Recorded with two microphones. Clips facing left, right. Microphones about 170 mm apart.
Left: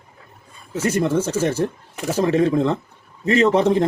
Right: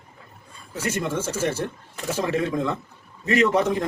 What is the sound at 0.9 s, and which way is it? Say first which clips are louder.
Speech: left 8 dB; 30° left (ahead or behind).